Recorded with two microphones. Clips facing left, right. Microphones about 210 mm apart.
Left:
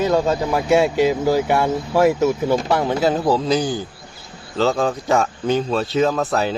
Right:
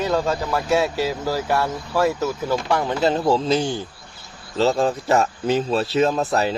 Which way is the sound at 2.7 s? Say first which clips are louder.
Left 2 dB; 10° left (ahead or behind).